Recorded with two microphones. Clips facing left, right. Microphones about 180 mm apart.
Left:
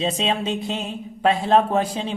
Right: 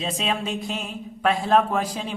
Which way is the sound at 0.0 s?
25° left (ahead or behind).